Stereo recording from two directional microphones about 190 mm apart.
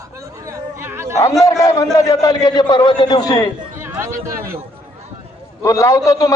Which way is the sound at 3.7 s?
10° right (ahead or behind).